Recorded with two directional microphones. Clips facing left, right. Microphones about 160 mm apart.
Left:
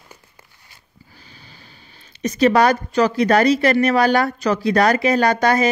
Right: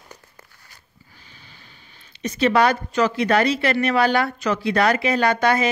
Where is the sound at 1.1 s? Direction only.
35° left (ahead or behind).